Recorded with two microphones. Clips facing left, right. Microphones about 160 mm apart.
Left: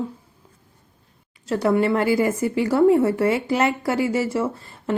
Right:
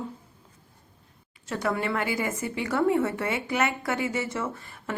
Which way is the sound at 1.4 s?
35° left (ahead or behind).